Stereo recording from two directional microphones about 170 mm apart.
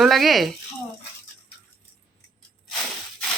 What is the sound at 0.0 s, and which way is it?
Speech, centre (ahead or behind).